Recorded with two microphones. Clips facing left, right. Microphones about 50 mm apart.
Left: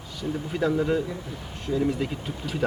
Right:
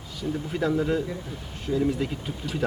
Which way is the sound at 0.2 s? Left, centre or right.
Centre.